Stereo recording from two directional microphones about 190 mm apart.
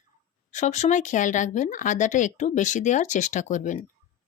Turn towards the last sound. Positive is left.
turn(degrees=40)  # may be behind; listen again after turning